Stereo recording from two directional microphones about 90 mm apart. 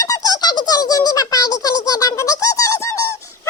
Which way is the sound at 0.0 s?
40° left (ahead or behind).